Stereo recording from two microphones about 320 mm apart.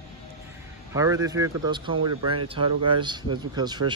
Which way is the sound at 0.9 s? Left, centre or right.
Centre.